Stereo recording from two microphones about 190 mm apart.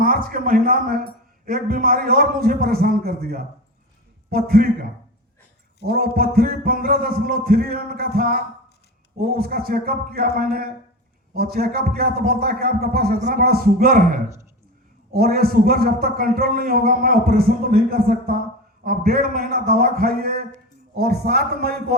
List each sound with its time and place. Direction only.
0.0 s a man's voice: 50° right (ahead or behind)